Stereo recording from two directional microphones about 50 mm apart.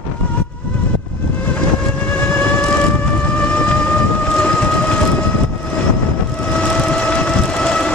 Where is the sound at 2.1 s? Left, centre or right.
Left.